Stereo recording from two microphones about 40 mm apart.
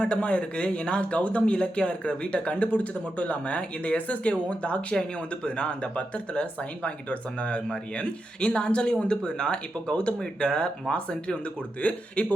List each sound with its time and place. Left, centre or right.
0.0 s speech: left
11.8 s speech: left